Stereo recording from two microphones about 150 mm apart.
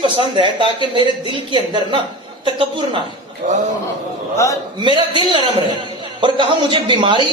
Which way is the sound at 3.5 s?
55° right (ahead or behind).